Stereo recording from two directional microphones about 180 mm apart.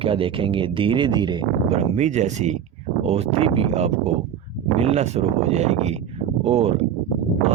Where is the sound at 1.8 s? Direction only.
40° right (ahead or behind).